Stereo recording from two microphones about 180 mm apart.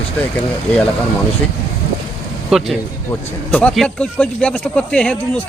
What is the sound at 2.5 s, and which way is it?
Speech, centre (ahead or behind).